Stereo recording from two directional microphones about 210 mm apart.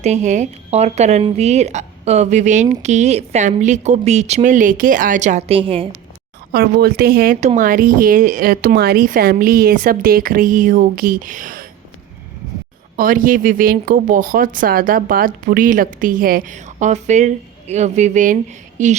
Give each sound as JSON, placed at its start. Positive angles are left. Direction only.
{"t": 0.0, "sound": "speech", "side_deg": -35}
{"t": 6.5, "sound": "speech", "side_deg": -50}
{"t": 13.0, "sound": "speech", "side_deg": -40}